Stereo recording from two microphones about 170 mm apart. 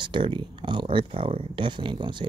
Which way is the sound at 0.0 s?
30° right (ahead or behind).